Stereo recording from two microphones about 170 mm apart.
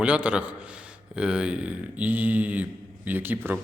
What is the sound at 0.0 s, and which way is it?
A man's voice, 5° right (ahead or behind).